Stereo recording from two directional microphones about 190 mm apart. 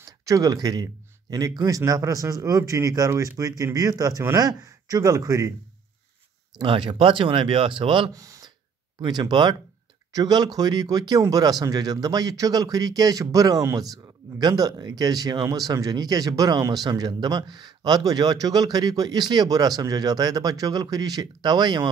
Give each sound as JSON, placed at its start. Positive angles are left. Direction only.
{"t": 0.0, "sound": "a man's voice", "side_deg": -15}
{"t": 6.6, "sound": "speech", "side_deg": -25}